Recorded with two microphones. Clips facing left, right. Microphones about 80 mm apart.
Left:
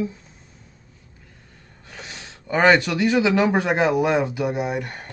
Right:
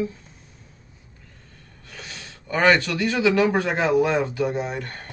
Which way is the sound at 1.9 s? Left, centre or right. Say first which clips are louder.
Left 1 dB; centre.